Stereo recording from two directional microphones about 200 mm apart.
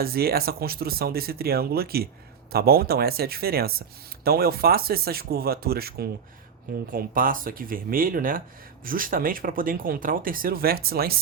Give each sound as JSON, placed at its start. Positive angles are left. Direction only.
{"t": 0.0, "sound": "speech", "side_deg": -50}